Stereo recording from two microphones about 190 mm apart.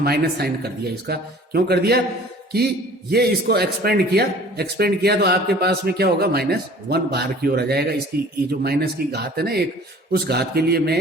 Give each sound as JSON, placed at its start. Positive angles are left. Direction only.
{"t": 0.0, "sound": "a man's voice", "side_deg": -55}
{"t": 3.1, "sound": "a man's voice", "side_deg": -55}